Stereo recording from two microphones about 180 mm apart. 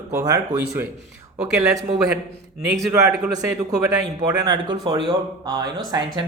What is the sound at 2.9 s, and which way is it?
Speech, 15° right (ahead or behind).